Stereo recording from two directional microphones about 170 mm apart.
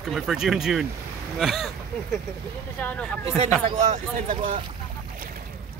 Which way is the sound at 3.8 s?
50° right (ahead or behind).